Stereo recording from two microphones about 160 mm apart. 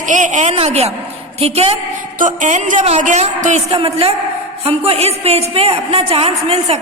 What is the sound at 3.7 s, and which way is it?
A woman's voice, 35° right (ahead or behind).